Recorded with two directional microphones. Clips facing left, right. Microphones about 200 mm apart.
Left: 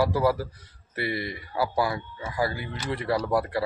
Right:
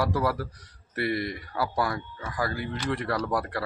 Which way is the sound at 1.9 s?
25° left (ahead or behind).